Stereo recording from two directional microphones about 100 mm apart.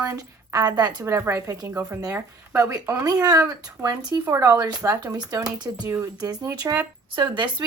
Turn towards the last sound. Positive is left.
turn(degrees=-50)  # may be behind; listen again after turning